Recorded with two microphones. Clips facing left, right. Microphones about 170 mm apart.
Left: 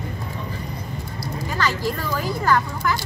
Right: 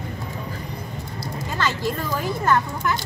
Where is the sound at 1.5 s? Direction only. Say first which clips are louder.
Even; 20° right (ahead or behind).